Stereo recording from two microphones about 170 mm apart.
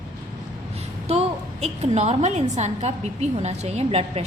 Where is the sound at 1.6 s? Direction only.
40° right (ahead or behind).